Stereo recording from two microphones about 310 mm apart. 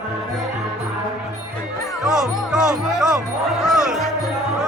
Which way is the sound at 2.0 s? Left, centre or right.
Centre.